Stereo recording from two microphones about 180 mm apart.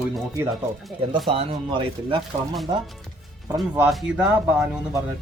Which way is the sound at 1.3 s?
30° right (ahead or behind).